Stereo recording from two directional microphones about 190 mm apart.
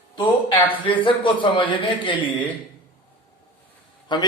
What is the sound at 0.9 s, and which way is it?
A man's voice, 25° left (ahead or behind).